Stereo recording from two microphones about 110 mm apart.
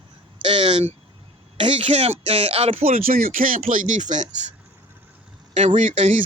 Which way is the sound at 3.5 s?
90° right.